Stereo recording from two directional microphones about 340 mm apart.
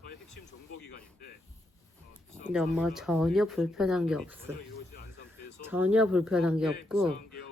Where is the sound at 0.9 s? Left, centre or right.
Left.